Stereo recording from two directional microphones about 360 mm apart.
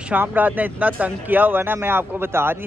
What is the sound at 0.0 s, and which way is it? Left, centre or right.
Speech, centre.